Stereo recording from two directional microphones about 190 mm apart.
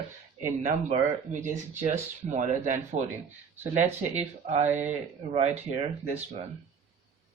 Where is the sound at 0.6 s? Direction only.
40° right (ahead or behind).